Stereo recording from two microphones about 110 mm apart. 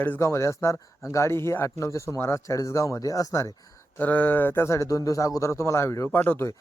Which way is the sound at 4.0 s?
15° left (ahead or behind).